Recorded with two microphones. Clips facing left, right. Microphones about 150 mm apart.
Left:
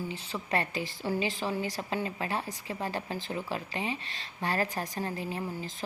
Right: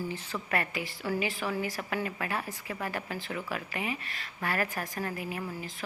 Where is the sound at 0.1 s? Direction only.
20° left (ahead or behind).